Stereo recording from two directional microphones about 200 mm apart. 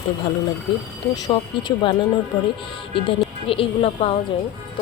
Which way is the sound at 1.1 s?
20° left (ahead or behind).